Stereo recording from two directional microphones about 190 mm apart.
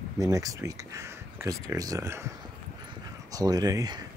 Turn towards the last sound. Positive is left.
turn(degrees=-20)  # may be behind; listen again after turning